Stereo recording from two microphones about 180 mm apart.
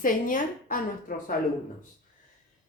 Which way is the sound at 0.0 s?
50° left (ahead or behind).